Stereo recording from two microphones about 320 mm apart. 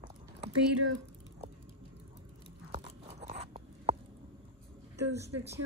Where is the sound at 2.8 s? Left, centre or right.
Right.